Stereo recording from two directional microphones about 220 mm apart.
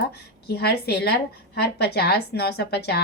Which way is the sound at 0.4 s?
45° left (ahead or behind).